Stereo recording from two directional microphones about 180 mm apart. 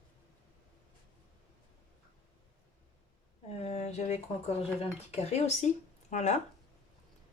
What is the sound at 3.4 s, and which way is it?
Speech, 35° left (ahead or behind).